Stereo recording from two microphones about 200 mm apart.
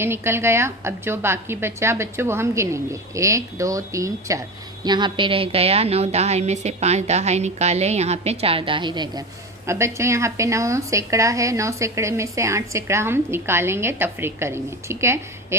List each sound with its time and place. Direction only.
0.0 s a woman's voice: 10° right (ahead or behind)